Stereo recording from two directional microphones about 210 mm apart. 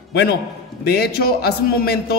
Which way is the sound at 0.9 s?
50° left (ahead or behind).